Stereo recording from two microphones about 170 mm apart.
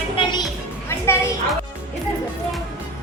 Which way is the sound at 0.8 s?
15° left (ahead or behind).